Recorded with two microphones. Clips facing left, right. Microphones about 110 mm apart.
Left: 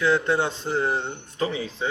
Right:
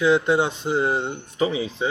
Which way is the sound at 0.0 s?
15° right (ahead or behind).